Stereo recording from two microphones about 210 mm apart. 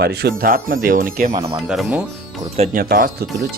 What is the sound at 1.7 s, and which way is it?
Speech, 5° right (ahead or behind).